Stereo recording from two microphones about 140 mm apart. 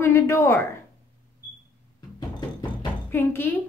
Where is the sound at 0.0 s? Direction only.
20° left (ahead or behind).